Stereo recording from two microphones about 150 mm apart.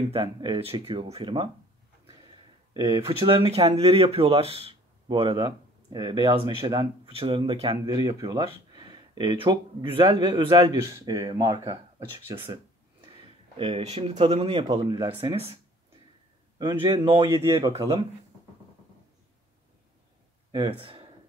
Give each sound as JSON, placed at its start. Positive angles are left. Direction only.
{"t": 0.1, "sound": "speech", "side_deg": -30}
{"t": 2.7, "sound": "speech", "side_deg": -20}
{"t": 3.0, "sound": "speech", "side_deg": -35}
{"t": 7.1, "sound": "speech", "side_deg": -40}
{"t": 7.8, "sound": "speech", "side_deg": -25}
{"t": 10.8, "sound": "speech", "side_deg": -20}
{"t": 13.0, "sound": "speech", "side_deg": -35}
{"t": 16.5, "sound": "a man's voice", "side_deg": -25}
{"t": 17.3, "sound": "speech", "side_deg": -15}
{"t": 20.5, "sound": "speech", "side_deg": -35}